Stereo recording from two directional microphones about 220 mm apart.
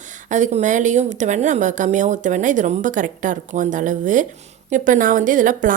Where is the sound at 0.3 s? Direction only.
35° right (ahead or behind).